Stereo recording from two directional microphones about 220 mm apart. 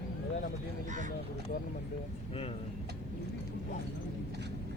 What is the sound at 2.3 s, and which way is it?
Speech, 25° left (ahead or behind).